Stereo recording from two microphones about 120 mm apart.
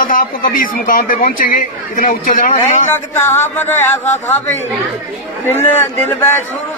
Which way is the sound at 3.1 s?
20° left (ahead or behind).